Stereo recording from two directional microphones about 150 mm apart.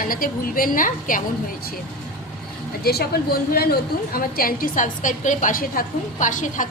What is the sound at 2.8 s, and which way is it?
Speech, 90° left.